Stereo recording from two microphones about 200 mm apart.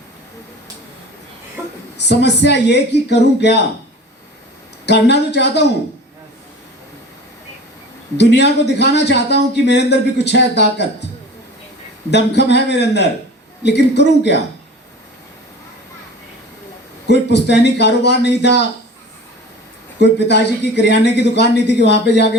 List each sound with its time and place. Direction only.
2.0 s a man's voice: 60° left (ahead or behind)
4.9 s a man's voice: 55° left (ahead or behind)
8.2 s a man's voice: 60° left (ahead or behind)
12.1 s a man's voice: 60° left (ahead or behind)
17.1 s a man's voice: 55° left (ahead or behind)
20.0 s a man's voice: 55° left (ahead or behind)